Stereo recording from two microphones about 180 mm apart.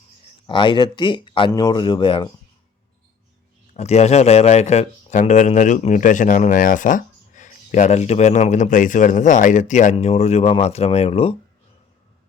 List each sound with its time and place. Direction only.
0.4 s speech: 25° left (ahead or behind)
3.8 s a man's voice: 40° left (ahead or behind)